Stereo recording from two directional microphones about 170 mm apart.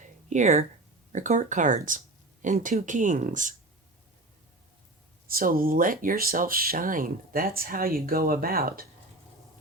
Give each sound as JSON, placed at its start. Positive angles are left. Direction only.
{"t": 0.0, "sound": "a sound", "side_deg": -45}
{"t": 1.1, "sound": "speech", "side_deg": -45}
{"t": 5.3, "sound": "speech", "side_deg": -60}